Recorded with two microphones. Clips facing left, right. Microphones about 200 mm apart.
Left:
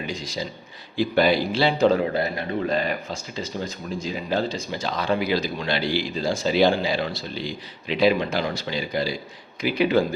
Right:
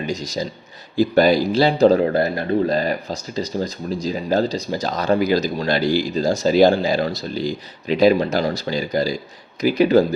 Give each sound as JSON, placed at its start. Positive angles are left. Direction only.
{"t": 0.0, "sound": "speech", "side_deg": -40}